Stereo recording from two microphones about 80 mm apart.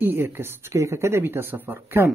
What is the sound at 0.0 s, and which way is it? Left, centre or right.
Speech, right.